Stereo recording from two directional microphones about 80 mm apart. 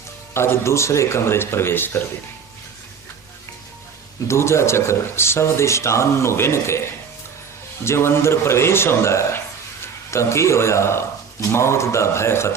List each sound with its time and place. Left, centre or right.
0.3 s speech: left
4.3 s speech: left
7.9 s speech: left